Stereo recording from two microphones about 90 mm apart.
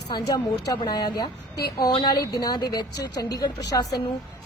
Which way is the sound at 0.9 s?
50° left (ahead or behind).